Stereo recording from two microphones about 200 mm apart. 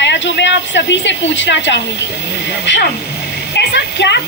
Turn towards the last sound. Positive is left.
turn(degrees=60)  # may be behind; listen again after turning